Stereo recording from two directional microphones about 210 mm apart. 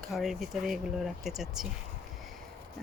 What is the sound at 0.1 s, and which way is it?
Speech, centre (ahead or behind).